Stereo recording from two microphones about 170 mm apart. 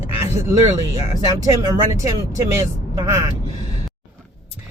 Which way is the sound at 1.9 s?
20° right (ahead or behind).